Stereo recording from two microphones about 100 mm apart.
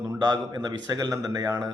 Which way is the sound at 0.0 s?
40° right (ahead or behind).